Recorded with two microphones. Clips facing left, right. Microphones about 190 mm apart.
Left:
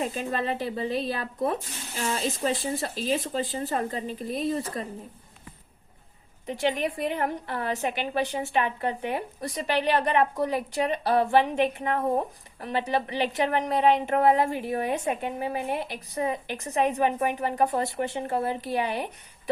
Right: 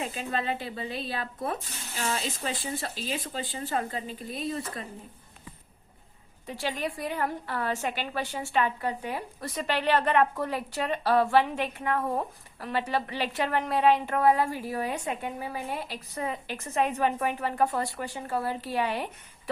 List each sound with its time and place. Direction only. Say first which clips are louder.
0.0 s speech: left 3 dB; 35° left (ahead or behind)
6.4 s a woman's voice: left 5 dB; 20° left (ahead or behind)